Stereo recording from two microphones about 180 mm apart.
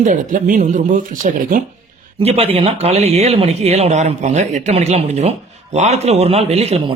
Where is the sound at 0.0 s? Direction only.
45° right (ahead or behind).